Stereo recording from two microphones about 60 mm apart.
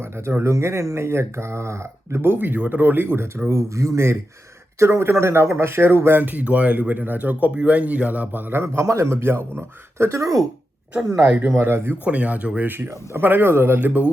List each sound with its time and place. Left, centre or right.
0.0 s speech: right
3.7 s speech: right
11.3 s speech: right
12.0 s speech: right
12.6 s speech: right
13.7 s speech: right